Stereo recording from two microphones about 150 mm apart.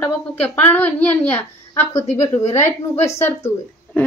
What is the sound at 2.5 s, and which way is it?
A woman's voice, 15° left (ahead or behind).